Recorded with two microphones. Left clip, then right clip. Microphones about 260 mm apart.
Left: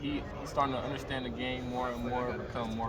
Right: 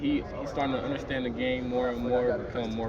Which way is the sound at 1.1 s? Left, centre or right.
Centre.